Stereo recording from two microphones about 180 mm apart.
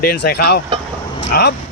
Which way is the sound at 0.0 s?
60° left (ahead or behind).